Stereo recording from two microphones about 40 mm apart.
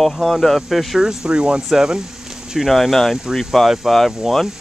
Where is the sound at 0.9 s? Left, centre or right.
Centre.